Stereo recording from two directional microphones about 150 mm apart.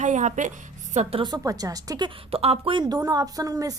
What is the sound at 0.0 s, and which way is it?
Speech, 55° right (ahead or behind).